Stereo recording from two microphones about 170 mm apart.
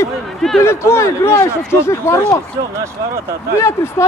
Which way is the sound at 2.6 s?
20° right (ahead or behind).